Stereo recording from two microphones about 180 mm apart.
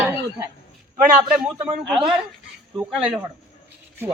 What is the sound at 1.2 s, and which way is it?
Speech, 10° right (ahead or behind).